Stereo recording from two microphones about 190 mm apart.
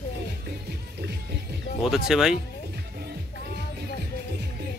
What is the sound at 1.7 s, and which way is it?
Music, 80° left.